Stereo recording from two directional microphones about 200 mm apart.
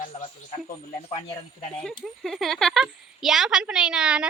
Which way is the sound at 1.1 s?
35° left (ahead or behind).